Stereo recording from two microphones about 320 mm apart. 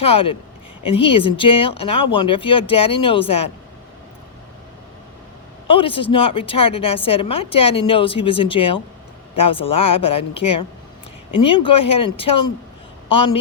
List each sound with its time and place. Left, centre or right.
0.0 s a woman's voice: centre
5.6 s a woman's voice: centre